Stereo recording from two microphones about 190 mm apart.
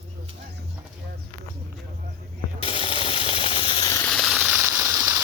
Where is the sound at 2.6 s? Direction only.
30° left (ahead or behind).